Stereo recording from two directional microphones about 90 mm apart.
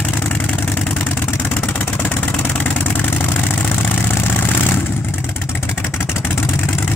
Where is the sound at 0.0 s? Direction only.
15° left (ahead or behind).